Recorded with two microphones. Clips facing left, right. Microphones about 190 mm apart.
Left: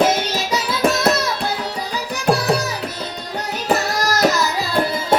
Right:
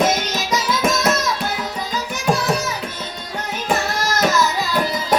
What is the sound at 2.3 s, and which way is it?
Music, 35° left (ahead or behind).